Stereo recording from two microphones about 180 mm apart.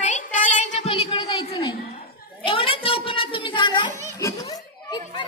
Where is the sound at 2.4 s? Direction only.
30° left (ahead or behind).